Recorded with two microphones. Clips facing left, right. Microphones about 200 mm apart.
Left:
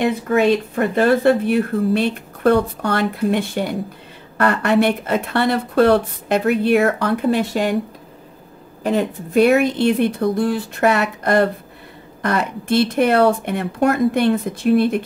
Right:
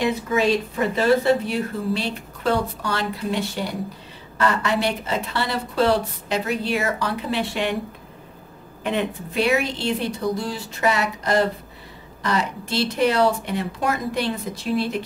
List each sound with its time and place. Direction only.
0.0 s speech: 60° left (ahead or behind); by 7.7 s 40° left (ahead or behind)
8.8 s speech: 45° left (ahead or behind)